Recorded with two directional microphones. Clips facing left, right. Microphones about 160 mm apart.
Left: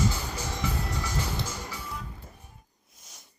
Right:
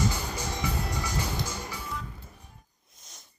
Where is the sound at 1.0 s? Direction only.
15° right (ahead or behind).